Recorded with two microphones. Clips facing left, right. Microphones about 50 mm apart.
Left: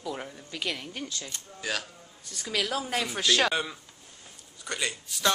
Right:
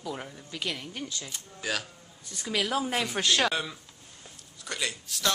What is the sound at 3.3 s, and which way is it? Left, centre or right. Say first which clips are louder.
A man's voice: left 1 dB; centre.